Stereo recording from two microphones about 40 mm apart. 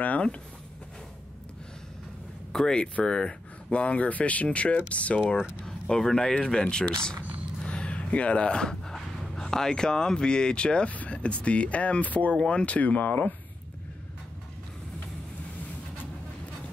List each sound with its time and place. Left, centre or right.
2.5 s speech: left
5.7 s speech: centre
7.6 s a sound: left
9.4 s speech: centre; by 12.4 s left
12.4 s speech: left